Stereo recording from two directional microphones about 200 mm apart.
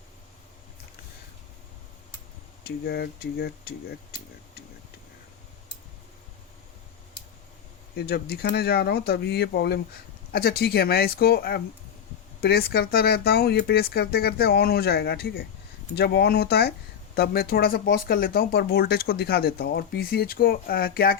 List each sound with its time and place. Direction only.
2.6 s speech: 50° left (ahead or behind)
7.9 s speech: 50° left (ahead or behind)